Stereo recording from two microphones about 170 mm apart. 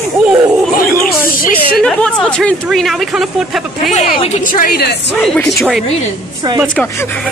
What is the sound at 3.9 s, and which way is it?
A woman's voice, 55° left (ahead or behind).